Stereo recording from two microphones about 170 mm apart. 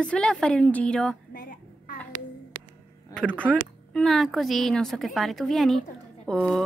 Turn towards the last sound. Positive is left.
turn(degrees=0)  # may be behind; listen again after turning